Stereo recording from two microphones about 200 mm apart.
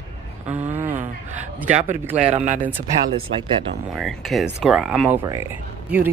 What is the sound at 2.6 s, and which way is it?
Speech, 10° right (ahead or behind).